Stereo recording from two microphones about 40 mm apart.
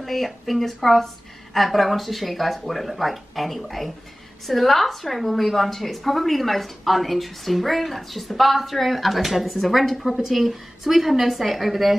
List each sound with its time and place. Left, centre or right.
0.0 s a woman's voice: centre